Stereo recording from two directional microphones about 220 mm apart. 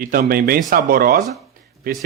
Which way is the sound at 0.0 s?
40° right (ahead or behind).